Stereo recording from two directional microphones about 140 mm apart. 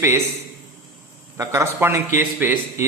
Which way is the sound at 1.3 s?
20° right (ahead or behind).